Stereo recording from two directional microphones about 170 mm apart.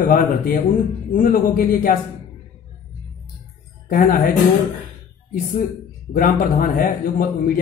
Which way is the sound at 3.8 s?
55° left (ahead or behind).